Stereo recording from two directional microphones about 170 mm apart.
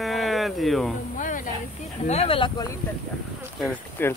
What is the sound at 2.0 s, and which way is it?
Speech, 35° left (ahead or behind).